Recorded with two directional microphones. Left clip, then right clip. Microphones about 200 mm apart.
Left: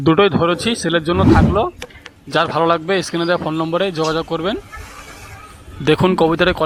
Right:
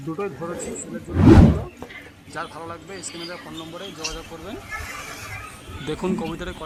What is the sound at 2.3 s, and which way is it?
A man's voice, 30° left (ahead or behind).